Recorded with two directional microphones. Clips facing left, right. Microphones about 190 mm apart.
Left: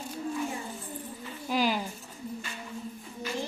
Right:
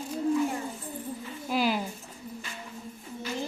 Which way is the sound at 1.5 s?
Centre (ahead or behind).